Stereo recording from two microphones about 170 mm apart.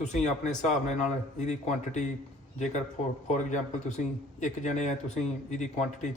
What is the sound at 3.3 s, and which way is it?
A man's voice, 45° left (ahead or behind).